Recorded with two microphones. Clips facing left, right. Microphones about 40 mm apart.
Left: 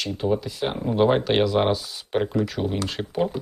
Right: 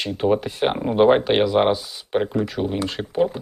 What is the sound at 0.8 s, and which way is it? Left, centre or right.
Speech, right.